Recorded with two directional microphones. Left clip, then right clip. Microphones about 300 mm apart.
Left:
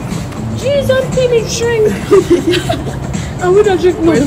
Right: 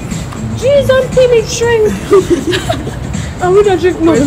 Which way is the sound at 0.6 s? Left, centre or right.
Centre.